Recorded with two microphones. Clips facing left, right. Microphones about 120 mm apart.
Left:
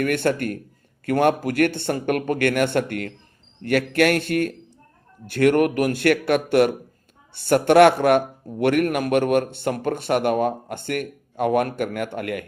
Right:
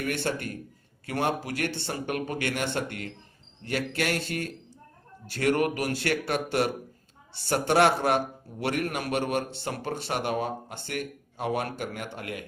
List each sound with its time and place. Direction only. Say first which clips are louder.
0.0 s a man's voice: left 8 dB; 55° left (ahead or behind)